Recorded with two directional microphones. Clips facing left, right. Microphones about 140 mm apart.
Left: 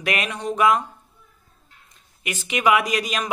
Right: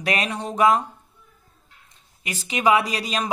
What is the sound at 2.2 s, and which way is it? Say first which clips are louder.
Speech: even; 30° right (ahead or behind).